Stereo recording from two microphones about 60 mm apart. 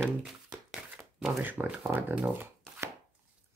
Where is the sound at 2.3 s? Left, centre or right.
Right.